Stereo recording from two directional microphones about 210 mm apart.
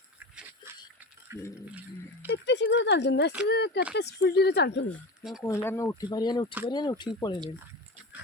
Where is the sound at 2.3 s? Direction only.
55° left (ahead or behind).